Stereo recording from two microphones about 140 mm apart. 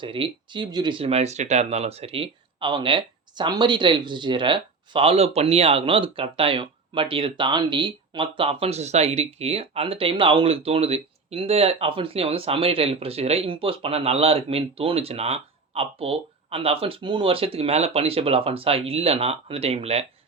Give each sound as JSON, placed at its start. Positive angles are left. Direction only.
{"t": 0.0, "sound": "speech", "side_deg": -35}